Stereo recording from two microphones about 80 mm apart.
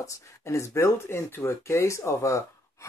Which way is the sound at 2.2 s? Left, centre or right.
Left.